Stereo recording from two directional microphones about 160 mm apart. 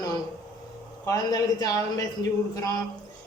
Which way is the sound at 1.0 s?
20° left (ahead or behind).